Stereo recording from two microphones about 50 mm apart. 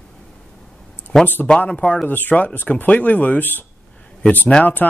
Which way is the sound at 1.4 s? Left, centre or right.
Left.